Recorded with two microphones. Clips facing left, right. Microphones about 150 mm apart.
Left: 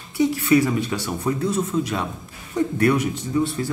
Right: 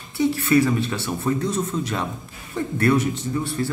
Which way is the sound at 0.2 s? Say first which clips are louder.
Left 1 dB; 15° left (ahead or behind).